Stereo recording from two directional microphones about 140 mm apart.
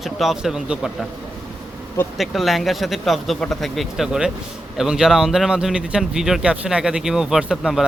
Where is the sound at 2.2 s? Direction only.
Centre (ahead or behind).